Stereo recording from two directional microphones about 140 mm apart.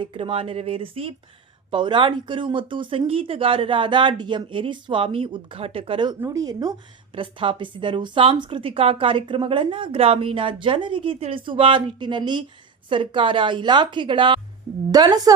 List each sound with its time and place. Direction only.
0.0 s a woman's voice: 40° right (ahead or behind)
6.1 s speech: 25° right (ahead or behind)
7.1 s a woman's voice: 40° right (ahead or behind)